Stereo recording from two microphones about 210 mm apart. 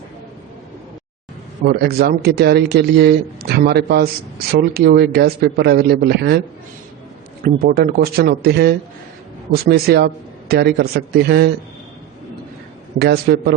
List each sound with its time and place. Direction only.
1.6 s speech: 50° right (ahead or behind)
7.4 s speech: 45° right (ahead or behind)
13.0 s speech: 50° right (ahead or behind)